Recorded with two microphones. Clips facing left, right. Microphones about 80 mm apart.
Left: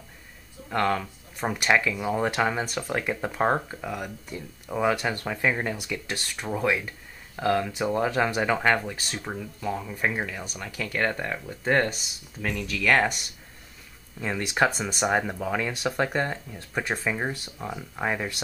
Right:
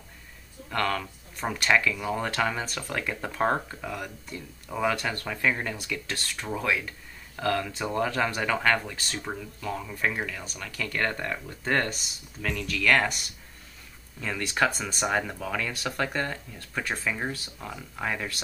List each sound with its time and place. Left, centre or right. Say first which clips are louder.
0.7 s speech: left 3 dB; centre
9.1 s speech: left 1 dB; centre
14.2 s speech: left 2 dB; centre